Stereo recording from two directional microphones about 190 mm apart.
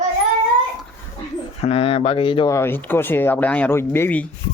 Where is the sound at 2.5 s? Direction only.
15° left (ahead or behind).